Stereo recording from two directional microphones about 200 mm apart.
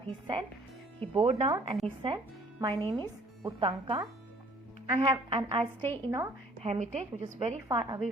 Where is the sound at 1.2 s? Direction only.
35° right (ahead or behind).